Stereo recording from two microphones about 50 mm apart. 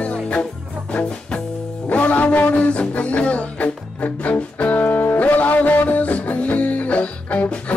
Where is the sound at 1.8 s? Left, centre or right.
Left.